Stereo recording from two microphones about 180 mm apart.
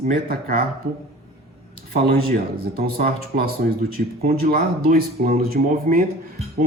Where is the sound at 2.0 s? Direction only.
55° right (ahead or behind).